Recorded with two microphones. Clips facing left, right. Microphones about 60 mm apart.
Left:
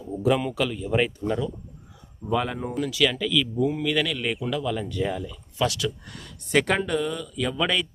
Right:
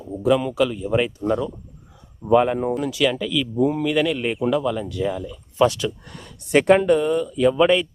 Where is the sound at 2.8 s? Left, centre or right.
Centre.